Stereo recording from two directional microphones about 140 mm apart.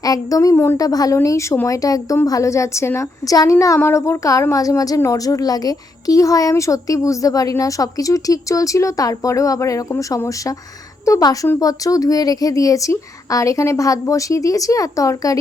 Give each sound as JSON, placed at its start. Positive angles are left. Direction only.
{"t": 0.0, "sound": "a woman's voice", "side_deg": 25}